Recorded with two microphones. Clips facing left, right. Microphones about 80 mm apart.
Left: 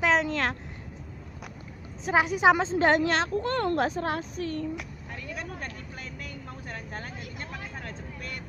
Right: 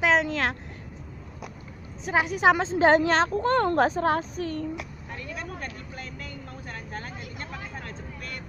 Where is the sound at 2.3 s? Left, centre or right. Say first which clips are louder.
Right 1 dB; centre.